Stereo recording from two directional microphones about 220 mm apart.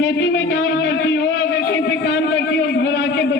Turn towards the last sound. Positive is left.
turn(degrees=50)  # may be behind; listen again after turning